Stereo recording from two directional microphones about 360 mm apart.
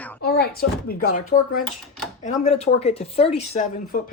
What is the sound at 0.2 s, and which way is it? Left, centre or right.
Speech, left.